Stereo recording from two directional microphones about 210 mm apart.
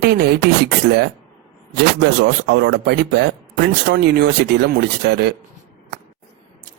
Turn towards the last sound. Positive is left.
turn(degrees=-50)  # may be behind; listen again after turning